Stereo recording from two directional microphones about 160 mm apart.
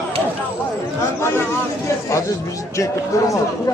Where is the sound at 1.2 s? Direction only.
15° left (ahead or behind).